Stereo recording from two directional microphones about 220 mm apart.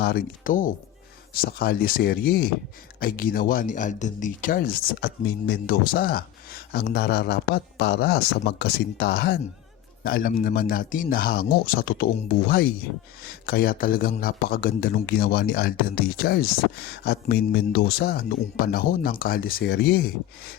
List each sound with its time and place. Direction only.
0.0 s a man's voice: 40° left (ahead or behind)